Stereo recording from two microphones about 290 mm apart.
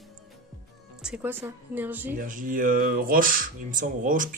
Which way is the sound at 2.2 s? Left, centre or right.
Right.